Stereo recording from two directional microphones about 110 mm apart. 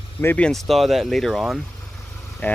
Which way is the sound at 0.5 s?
Centre (ahead or behind).